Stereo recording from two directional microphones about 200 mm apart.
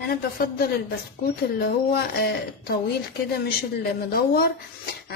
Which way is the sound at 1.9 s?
55° left (ahead or behind).